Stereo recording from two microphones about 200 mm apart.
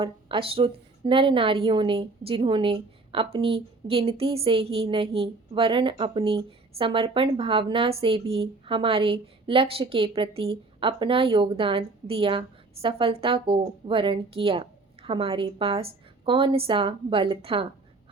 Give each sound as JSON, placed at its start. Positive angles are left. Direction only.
{"t": 0.0, "sound": "a woman's voice", "side_deg": -25}